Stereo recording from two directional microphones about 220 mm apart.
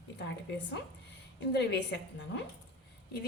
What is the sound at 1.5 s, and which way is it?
Speech, 50° left (ahead or behind).